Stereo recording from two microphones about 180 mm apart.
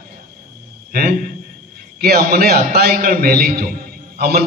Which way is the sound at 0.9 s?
55° right (ahead or behind).